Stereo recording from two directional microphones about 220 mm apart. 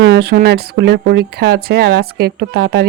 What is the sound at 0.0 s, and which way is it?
Speech, 50° right (ahead or behind).